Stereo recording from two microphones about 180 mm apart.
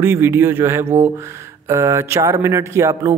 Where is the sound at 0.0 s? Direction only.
15° right (ahead or behind).